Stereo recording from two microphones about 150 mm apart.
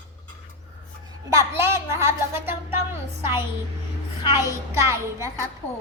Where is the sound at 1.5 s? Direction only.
15° right (ahead or behind).